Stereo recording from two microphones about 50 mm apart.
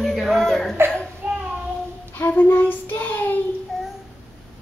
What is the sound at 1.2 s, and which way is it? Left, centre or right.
Child singing, right.